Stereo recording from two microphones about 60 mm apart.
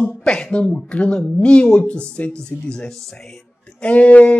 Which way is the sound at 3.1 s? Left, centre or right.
Centre.